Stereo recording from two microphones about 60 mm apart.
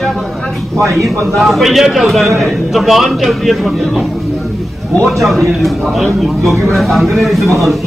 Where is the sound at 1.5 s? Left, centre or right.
Centre.